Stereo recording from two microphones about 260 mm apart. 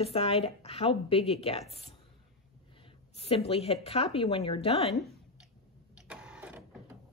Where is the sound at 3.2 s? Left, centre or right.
Left.